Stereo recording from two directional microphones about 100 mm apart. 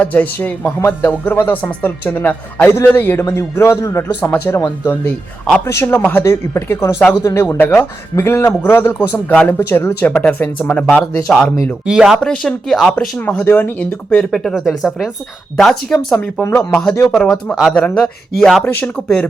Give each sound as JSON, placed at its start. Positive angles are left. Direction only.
{"t": 0.0, "sound": "a man's voice", "side_deg": 15}
{"t": 5.6, "sound": "a man's voice", "side_deg": 25}
{"t": 7.4, "sound": "a man's voice", "side_deg": 20}
{"t": 12.2, "sound": "speech", "side_deg": 5}
{"t": 13.1, "sound": "speech", "side_deg": 15}
{"t": 16.4, "sound": "speech", "side_deg": 15}